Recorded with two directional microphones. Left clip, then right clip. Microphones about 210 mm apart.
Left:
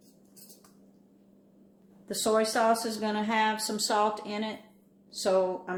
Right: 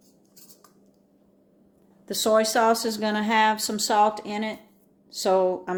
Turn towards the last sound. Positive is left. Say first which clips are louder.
# right 5 dB
turn(degrees=-45)  # may be behind; listen again after turning